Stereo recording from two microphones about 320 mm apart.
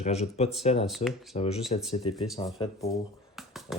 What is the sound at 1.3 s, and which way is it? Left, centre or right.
Speech, centre.